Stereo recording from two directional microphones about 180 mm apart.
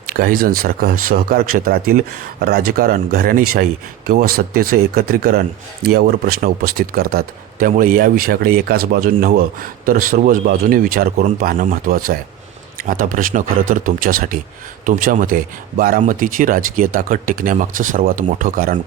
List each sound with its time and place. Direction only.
0.1 s speech: 55° right (ahead or behind)